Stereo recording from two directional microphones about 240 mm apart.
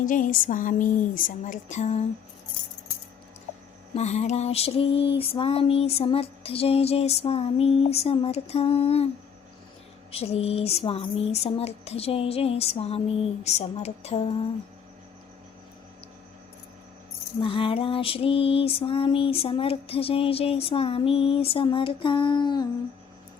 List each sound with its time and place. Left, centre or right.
0.0 s speech: left
3.9 s music: left
10.1 s music: left
17.4 s music: left